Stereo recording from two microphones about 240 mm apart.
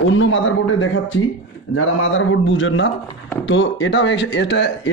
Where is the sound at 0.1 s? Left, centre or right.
Left.